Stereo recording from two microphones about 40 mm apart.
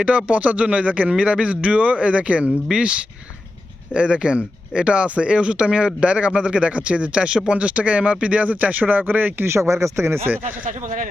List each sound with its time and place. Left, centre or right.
0.0 s speech: right
3.9 s speech: right
10.0 s speech: right